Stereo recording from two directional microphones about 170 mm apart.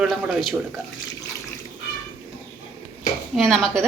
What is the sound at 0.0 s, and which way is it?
Speech, centre (ahead or behind).